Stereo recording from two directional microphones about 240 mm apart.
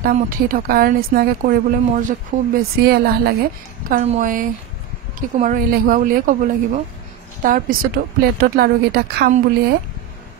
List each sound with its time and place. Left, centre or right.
0.0 s a woman's voice: right
3.9 s a woman's voice: right